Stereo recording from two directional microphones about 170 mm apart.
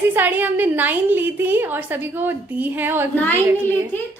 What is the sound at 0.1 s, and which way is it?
A woman's voice, 10° right (ahead or behind).